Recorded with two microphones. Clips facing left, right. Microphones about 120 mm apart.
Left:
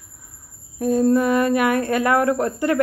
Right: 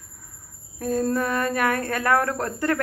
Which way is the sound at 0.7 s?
15° left (ahead or behind).